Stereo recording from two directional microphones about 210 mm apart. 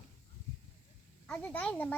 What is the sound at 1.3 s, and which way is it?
Speech, 5° left (ahead or behind).